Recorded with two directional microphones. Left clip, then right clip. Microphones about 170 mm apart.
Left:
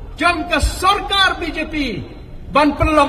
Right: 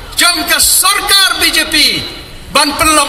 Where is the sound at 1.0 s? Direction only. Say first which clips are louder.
Right 7 dB; 35° left (ahead or behind).